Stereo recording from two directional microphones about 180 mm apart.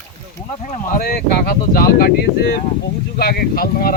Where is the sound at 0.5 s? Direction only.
40° left (ahead or behind).